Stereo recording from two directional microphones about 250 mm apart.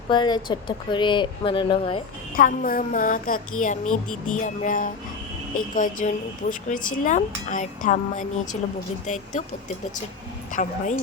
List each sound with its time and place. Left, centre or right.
0.1 s speech: centre
2.3 s speech: left
10.5 s speech: left